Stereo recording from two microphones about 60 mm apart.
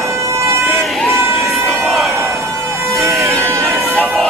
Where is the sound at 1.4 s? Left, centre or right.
Centre.